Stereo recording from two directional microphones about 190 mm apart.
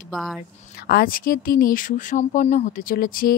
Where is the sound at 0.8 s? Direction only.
55° left (ahead or behind).